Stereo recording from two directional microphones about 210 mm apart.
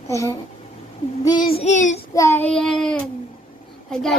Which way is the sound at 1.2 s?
20° left (ahead or behind).